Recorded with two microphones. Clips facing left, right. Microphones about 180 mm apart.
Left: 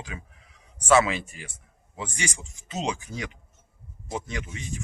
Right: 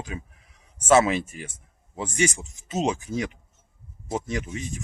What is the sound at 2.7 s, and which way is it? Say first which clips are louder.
Speech: right 5 dB; 45° right (ahead or behind).